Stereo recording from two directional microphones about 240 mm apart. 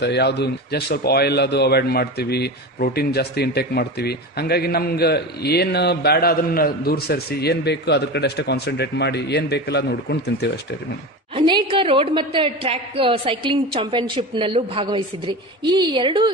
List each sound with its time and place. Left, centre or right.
0.0 s a man's voice: left
11.3 s a woman's voice: centre